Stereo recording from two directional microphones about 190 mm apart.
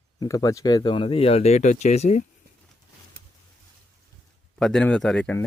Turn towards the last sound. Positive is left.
turn(degrees=10)  # may be behind; listen again after turning